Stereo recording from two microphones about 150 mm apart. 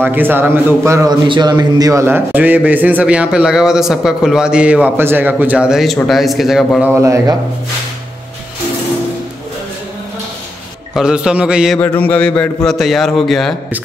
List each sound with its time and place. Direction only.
0.0 s a man's voice: 15° right (ahead or behind)
1.2 s a man's voice: 30° right (ahead or behind); by 6.9 s centre (ahead or behind)
7.0 s a man's voice: 20° right (ahead or behind)
11.0 s a man's voice: 5° right (ahead or behind)
11.8 s a sound: 10° left (ahead or behind)
12.6 s a man's voice: centre (ahead or behind)